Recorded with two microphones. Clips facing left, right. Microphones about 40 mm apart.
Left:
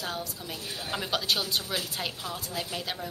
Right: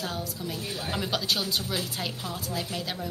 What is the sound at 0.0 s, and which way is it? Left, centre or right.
A woman's voice, centre.